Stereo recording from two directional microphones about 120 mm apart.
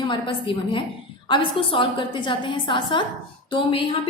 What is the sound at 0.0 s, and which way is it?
A woman's voice, 45° left (ahead or behind).